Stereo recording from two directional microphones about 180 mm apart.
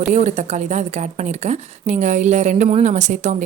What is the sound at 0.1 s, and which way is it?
A woman's voice, 40° right (ahead or behind).